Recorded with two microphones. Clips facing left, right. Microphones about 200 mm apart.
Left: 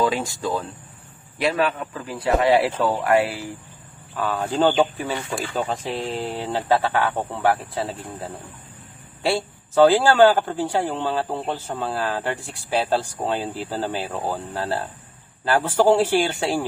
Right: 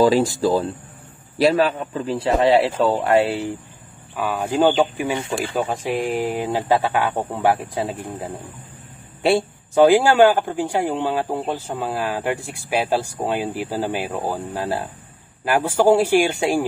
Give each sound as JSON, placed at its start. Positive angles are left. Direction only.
{"t": 0.0, "sound": "speech", "side_deg": -35}
{"t": 4.1, "sound": "a man's voice", "side_deg": -10}